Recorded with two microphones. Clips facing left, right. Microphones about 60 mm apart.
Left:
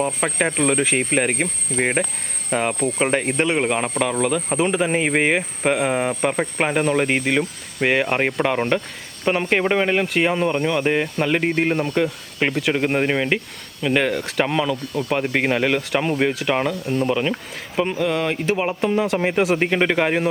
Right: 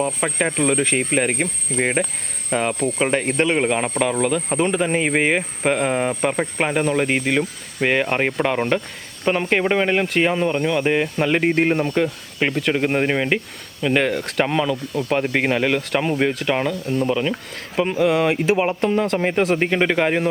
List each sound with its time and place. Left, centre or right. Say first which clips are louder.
0.0 s speech: even; centre
16.8 s speech: even; centre
17.7 s speech: right 3 dB; centre